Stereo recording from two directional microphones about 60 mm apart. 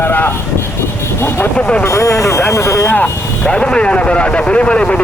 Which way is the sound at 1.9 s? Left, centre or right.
Left.